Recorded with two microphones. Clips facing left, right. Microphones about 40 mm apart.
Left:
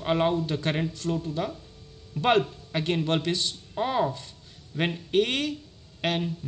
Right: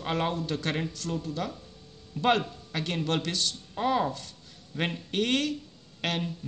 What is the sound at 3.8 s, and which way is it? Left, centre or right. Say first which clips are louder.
Speech: left 1 dB; centre.